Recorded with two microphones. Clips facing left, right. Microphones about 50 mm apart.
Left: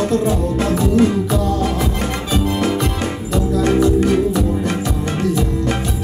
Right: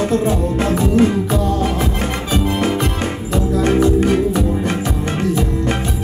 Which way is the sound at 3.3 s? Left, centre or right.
Right.